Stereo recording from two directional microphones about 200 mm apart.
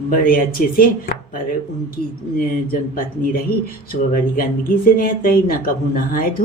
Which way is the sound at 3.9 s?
45° left (ahead or behind).